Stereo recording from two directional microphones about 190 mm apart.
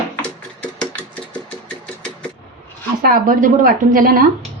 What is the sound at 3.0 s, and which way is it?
Speech, 45° right (ahead or behind).